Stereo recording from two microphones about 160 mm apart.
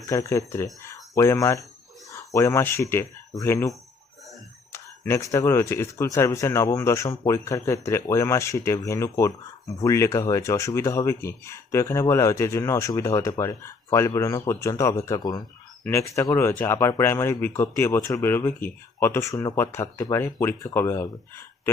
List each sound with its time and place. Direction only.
0.1 s speech: 20° left (ahead or behind)